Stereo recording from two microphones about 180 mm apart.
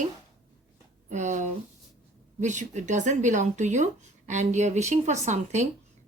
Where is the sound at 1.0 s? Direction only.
45° right (ahead or behind).